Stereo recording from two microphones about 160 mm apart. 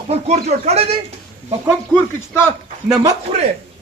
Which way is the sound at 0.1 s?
45° right (ahead or behind).